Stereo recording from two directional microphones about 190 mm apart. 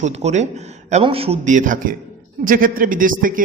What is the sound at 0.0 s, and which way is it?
A man's voice, 35° right (ahead or behind).